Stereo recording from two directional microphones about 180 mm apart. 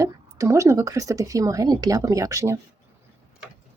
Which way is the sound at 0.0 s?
15° right (ahead or behind).